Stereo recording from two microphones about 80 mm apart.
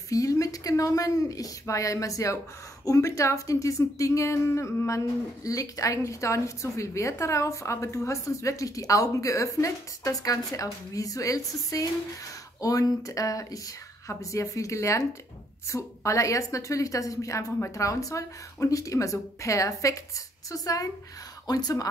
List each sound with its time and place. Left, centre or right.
0.1 s a woman's voice: left